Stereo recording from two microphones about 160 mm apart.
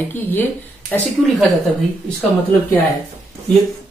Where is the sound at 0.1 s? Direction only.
10° left (ahead or behind).